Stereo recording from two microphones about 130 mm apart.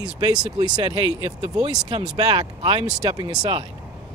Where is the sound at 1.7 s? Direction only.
35° right (ahead or behind).